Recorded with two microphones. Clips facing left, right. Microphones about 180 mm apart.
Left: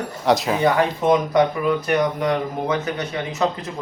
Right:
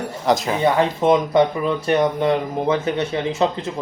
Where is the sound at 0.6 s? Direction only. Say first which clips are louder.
Right 3 dB; 25° right (ahead or behind).